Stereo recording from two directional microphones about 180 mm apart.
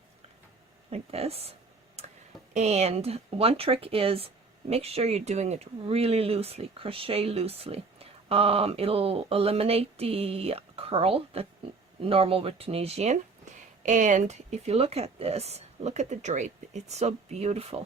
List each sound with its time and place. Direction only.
0.9 s speech: 35° right (ahead or behind)
2.0 s tick: 35° right (ahead or behind)
2.5 s speech: 40° right (ahead or behind)